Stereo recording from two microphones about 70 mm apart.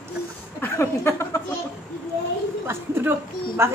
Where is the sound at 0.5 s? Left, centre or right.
Left.